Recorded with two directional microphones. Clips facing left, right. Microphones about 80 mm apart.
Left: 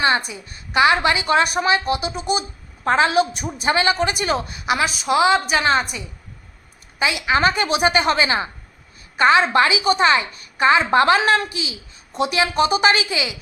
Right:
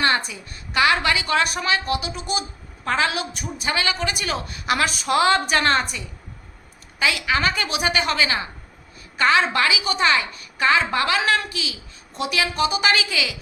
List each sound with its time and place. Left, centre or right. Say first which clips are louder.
0.3 s a woman's voice: left 2 dB; left
7.0 s a woman's voice: left 3 dB; left